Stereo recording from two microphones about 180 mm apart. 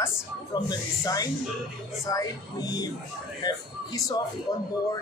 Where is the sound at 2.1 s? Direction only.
20° left (ahead or behind).